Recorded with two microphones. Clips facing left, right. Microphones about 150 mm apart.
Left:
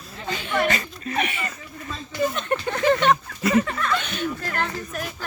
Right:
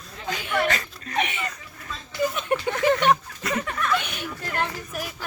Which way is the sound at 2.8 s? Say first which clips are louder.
Left 2 dB; 15° right (ahead or behind).